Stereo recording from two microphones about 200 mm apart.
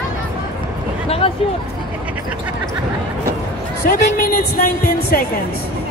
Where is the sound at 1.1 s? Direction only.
30° left (ahead or behind).